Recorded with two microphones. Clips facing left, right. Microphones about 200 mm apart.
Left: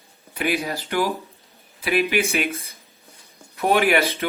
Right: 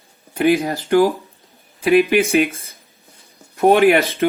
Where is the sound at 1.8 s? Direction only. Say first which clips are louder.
Right 8 dB; 50° right (ahead or behind).